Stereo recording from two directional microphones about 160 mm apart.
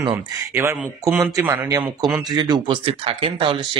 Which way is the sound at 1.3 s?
15° right (ahead or behind).